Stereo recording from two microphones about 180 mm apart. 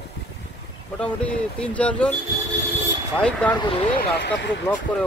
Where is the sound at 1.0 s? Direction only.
5° left (ahead or behind).